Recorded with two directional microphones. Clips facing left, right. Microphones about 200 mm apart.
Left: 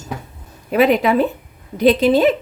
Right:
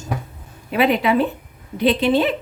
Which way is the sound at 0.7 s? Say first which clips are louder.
Left 3 dB; 45° left (ahead or behind).